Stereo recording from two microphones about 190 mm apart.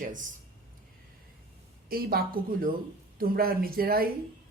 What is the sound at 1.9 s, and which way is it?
Speech, 50° right (ahead or behind).